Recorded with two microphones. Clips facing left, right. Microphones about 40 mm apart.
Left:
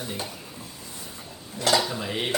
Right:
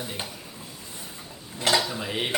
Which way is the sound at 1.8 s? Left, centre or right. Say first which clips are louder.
Left 1 dB; centre.